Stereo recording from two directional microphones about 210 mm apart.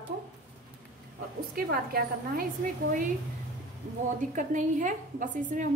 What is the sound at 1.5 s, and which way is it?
Speech, 45° right (ahead or behind).